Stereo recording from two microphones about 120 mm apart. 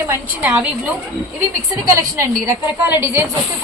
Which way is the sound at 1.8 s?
25° right (ahead or behind).